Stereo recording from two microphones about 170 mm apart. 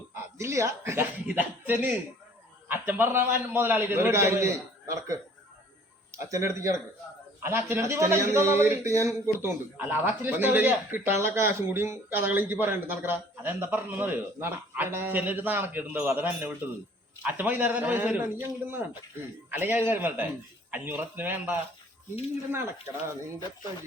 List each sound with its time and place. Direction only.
0.1 s a man's voice: 15° right (ahead or behind)